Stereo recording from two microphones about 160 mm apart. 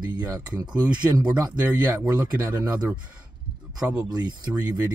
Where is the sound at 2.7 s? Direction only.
25° right (ahead or behind).